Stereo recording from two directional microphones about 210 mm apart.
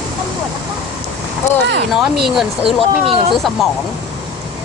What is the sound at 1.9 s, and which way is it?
Speech, centre (ahead or behind).